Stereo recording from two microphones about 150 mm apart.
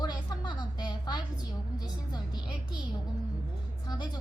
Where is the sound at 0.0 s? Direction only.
25° left (ahead or behind).